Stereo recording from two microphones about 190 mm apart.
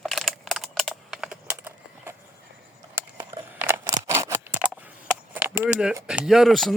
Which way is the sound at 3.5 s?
10° right (ahead or behind).